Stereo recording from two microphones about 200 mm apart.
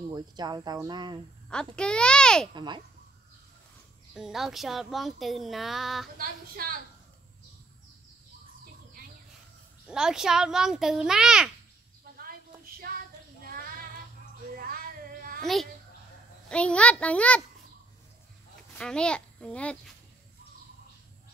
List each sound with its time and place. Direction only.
0.1 s speech: 20° right (ahead or behind)
1.5 s speech: 5° left (ahead or behind)
2.5 s speech: 25° right (ahead or behind)
4.1 s speech: centre (ahead or behind)
6.1 s a woman's voice: 45° right (ahead or behind)
9.8 s speech: 5° right (ahead or behind)
13.4 s child singing: 45° right (ahead or behind)
14.5 s a sound: 45° right (ahead or behind)
15.4 s a child's voice: centre (ahead or behind)
18.8 s speech: 5° left (ahead or behind)